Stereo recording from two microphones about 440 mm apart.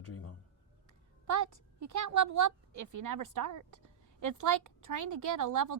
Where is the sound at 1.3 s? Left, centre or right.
Right.